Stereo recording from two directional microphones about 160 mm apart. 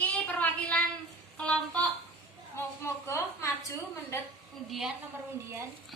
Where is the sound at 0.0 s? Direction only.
10° left (ahead or behind).